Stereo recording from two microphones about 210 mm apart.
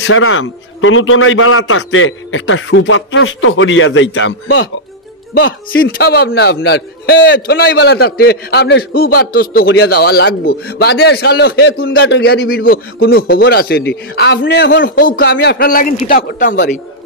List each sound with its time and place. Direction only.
0.0 s a man's voice: 70° left (ahead or behind)
5.3 s a man's voice: 50° left (ahead or behind)